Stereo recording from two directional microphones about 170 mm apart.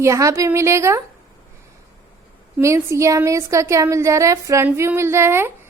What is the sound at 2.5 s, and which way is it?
Speech, 15° right (ahead or behind).